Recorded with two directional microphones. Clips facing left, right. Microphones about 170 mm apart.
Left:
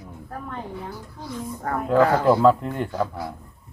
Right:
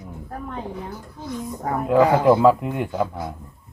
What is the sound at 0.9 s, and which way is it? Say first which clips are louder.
A woman's voice: right 2 dB; 20° right (ahead or behind).